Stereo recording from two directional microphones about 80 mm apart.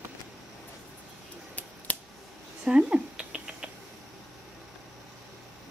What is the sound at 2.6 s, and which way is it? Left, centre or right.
Rodents, centre.